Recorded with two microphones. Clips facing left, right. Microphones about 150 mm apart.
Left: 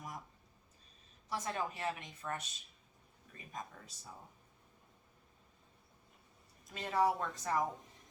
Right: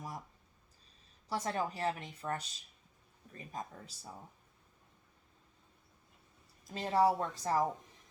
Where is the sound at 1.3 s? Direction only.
35° right (ahead or behind).